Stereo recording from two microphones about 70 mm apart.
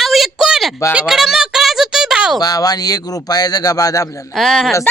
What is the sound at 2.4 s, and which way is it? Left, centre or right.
Speech, left.